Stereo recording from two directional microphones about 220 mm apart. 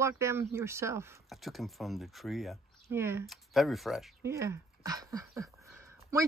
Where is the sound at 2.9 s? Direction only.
10° right (ahead or behind).